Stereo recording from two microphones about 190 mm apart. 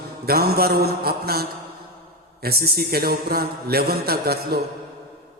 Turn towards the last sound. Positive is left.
turn(degrees=-55)  # may be behind; listen again after turning